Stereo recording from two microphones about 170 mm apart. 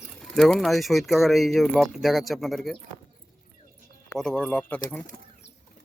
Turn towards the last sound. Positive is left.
turn(degrees=10)  # may be behind; listen again after turning